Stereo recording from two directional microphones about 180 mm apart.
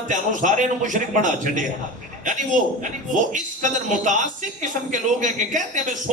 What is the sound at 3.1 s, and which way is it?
A man's voice, 45° right (ahead or behind).